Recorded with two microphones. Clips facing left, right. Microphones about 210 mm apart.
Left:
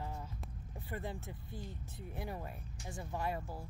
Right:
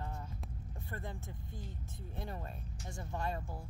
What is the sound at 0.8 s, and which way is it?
Speech, 15° left (ahead or behind).